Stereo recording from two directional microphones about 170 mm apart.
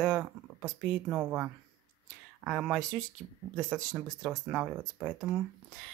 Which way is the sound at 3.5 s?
20° right (ahead or behind).